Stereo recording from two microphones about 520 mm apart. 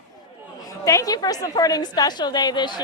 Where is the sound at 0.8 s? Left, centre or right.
Centre.